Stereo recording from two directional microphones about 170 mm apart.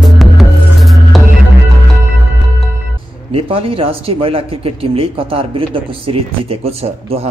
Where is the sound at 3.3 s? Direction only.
35° right (ahead or behind).